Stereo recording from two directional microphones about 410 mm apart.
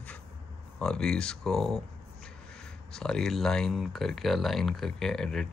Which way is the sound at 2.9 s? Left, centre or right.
Centre.